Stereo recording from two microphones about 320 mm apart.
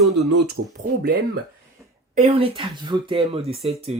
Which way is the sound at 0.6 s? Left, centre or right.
Right.